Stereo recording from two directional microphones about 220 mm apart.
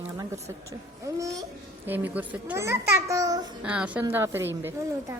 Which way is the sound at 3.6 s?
5° right (ahead or behind).